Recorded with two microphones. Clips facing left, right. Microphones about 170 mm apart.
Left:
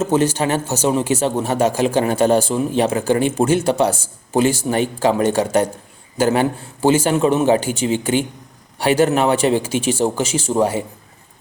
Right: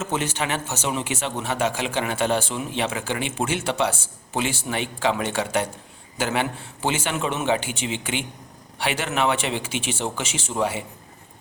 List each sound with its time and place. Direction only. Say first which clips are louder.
0.0 s speech: left 9 dB; 35° left (ahead or behind)